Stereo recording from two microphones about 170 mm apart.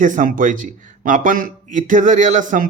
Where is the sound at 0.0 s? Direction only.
50° right (ahead or behind).